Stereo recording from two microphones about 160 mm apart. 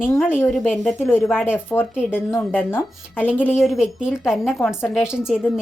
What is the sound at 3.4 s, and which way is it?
A woman's voice, 5° right (ahead or behind).